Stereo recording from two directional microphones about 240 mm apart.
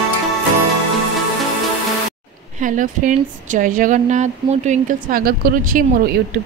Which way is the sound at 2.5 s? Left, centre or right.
Right.